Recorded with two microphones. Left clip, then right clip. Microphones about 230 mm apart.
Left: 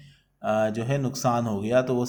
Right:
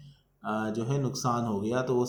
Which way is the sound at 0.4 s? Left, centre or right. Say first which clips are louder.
Left 8 dB; left.